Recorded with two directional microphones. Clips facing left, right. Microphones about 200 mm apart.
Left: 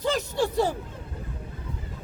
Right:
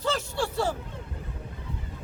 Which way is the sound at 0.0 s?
15° left (ahead or behind).